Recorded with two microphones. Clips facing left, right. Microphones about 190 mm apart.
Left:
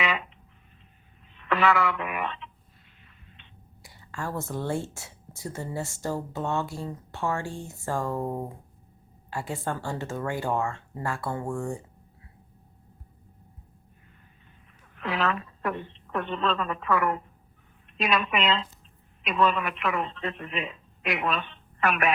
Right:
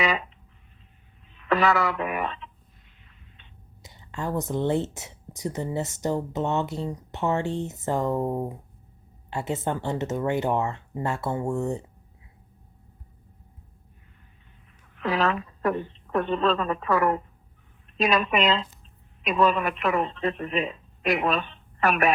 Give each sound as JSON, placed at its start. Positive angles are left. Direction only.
{"t": 0.0, "sound": "a sound", "side_deg": -40}
{"t": 1.5, "sound": "speech", "side_deg": -40}
{"t": 3.8, "sound": "speech", "side_deg": -20}
{"t": 15.0, "sound": "a woman's voice", "side_deg": -40}